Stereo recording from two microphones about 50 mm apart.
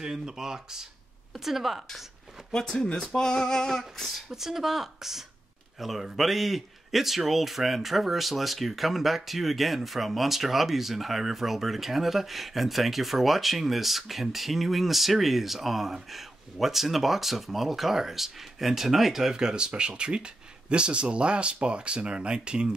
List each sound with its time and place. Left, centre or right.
0.0 s a man's voice: centre
2.5 s female singing: centre
4.3 s a man's voice: centre